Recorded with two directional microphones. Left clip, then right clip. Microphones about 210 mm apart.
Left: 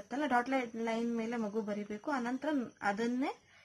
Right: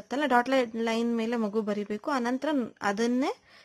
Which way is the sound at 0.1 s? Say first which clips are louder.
Right 8 dB; 40° right (ahead or behind).